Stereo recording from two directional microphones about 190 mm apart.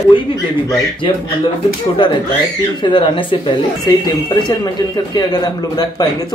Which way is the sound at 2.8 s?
25° left (ahead or behind).